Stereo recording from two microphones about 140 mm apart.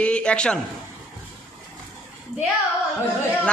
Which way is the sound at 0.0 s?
5° left (ahead or behind).